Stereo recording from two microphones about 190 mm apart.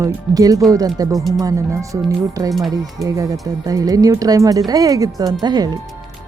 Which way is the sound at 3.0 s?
15° right (ahead or behind).